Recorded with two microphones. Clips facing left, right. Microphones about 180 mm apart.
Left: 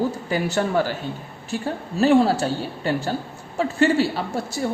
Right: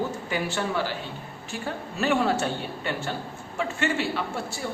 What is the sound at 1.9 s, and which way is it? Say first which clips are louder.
A man's voice: left 7 dB; 35° left (ahead or behind).